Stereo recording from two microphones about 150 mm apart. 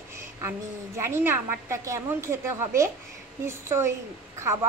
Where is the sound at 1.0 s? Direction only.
15° right (ahead or behind).